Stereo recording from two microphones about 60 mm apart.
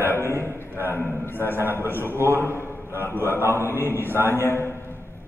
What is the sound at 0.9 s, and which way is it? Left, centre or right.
Speech, left.